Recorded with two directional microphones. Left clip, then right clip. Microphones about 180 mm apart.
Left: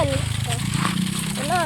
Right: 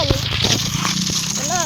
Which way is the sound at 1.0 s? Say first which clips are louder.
Right 6 dB; 15° left (ahead or behind).